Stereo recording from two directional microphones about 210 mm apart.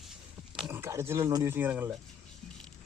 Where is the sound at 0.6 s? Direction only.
15° right (ahead or behind).